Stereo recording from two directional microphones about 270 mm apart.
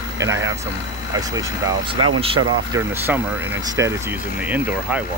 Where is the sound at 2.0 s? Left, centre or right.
Right.